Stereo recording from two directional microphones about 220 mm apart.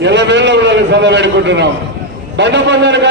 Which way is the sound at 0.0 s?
50° right (ahead or behind).